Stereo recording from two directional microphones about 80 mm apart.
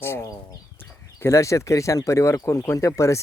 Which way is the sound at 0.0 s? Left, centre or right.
Left.